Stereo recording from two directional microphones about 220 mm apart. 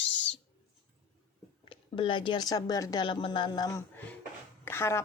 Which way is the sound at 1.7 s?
20° left (ahead or behind).